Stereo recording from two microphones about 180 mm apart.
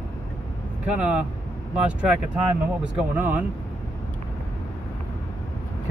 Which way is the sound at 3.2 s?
10° right (ahead or behind).